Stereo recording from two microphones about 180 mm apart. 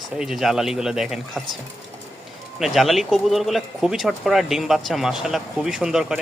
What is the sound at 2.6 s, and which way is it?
Speech, centre (ahead or behind).